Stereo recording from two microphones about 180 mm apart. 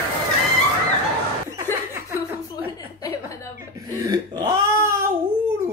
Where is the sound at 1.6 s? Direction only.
15° right (ahead or behind).